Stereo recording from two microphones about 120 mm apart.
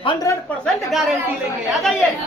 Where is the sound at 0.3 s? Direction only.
25° left (ahead or behind).